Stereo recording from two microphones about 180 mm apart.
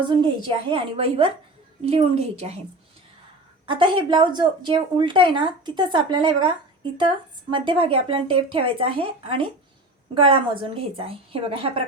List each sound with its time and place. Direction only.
0.0 s a woman's voice: 25° right (ahead or behind)
3.7 s a woman's voice: 25° right (ahead or behind)
7.5 s a woman's voice: 30° right (ahead or behind)